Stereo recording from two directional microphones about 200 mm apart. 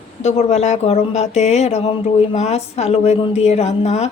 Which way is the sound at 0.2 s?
35° left (ahead or behind).